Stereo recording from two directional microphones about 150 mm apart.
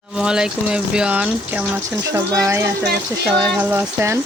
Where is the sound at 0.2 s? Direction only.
5° right (ahead or behind).